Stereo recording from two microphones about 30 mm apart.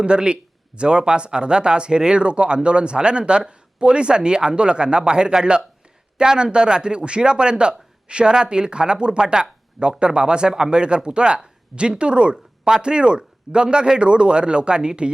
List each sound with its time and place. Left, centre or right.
0.0 s speech: right